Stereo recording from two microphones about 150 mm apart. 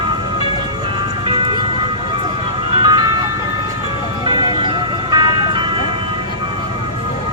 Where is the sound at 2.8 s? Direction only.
30° right (ahead or behind).